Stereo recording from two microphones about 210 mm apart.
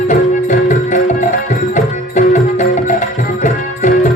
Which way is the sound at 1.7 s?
35° left (ahead or behind).